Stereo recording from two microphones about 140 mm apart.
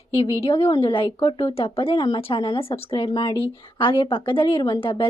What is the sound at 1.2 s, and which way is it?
Speech, 25° left (ahead or behind).